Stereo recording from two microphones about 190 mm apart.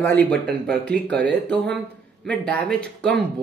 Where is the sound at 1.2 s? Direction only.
65° right (ahead or behind).